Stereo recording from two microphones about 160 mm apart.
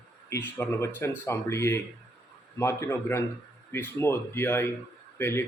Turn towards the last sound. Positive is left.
turn(degrees=15)  # may be behind; listen again after turning